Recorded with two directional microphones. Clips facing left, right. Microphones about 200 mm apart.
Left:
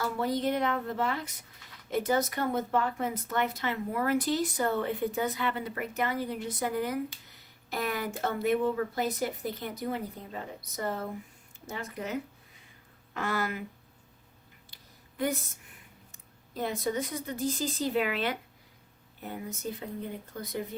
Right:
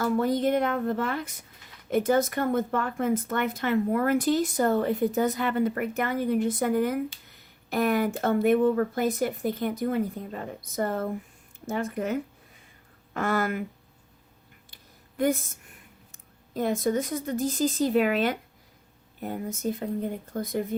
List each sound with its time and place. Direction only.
0.0 s a woman's voice: 50° right (ahead or behind)
16.6 s a woman's voice: 50° right (ahead or behind)